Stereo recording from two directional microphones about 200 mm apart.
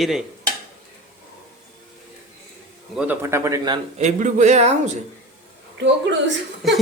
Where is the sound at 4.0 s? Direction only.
35° right (ahead or behind).